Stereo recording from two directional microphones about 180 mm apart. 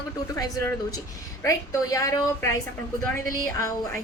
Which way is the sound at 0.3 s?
20° left (ahead or behind).